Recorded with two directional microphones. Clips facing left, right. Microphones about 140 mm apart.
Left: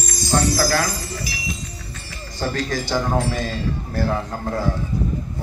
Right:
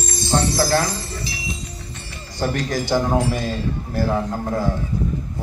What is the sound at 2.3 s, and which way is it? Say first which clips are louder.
Speech: right 2 dB; 15° right (ahead or behind).